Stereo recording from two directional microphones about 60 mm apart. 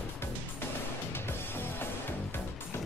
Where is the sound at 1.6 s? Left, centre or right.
Left.